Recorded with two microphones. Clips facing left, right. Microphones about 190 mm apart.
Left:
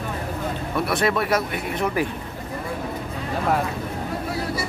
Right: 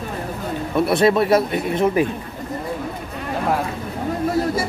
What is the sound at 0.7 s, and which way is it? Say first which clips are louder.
Speech: right 7 dB; 25° right (ahead or behind).